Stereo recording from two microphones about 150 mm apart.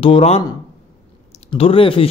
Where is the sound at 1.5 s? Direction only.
35° left (ahead or behind).